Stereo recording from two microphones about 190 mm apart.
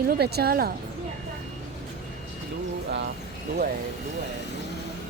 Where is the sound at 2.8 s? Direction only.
65° right (ahead or behind).